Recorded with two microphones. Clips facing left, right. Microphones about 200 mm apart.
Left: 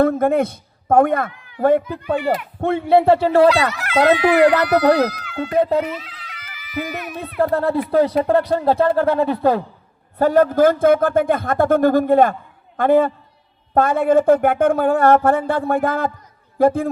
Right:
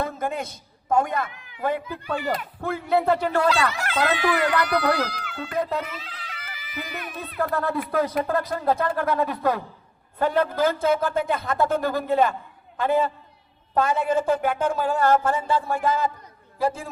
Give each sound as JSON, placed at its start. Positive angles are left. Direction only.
{"t": 0.0, "sound": "a man's voice", "side_deg": 55}
{"t": 1.9, "sound": "a man's voice", "side_deg": 35}
{"t": 6.0, "sound": "a sound", "side_deg": -30}
{"t": 7.3, "sound": "a man's voice", "side_deg": 30}
{"t": 10.2, "sound": "a man's voice", "side_deg": 45}